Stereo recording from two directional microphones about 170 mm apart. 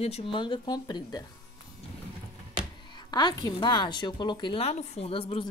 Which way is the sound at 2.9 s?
25° left (ahead or behind).